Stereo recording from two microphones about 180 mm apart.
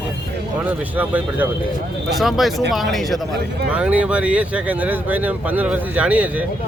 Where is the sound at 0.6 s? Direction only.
10° right (ahead or behind).